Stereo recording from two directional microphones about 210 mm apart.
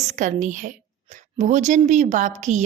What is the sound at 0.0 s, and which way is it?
A woman's voice, 35° right (ahead or behind).